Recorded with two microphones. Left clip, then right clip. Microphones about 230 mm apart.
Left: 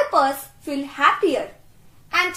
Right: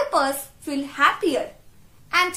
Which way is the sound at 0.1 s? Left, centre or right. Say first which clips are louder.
Left 3 dB; centre.